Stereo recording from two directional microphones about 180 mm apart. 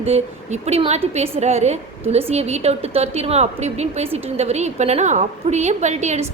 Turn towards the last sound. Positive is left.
turn(degrees=-40)  # may be behind; listen again after turning